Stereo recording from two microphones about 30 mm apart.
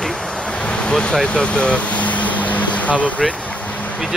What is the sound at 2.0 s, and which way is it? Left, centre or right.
Vehicle, left.